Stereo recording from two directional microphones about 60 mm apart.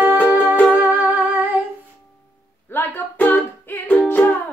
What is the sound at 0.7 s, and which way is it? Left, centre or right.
Music, right.